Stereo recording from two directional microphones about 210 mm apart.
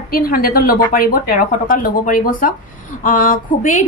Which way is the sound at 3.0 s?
40° left (ahead or behind).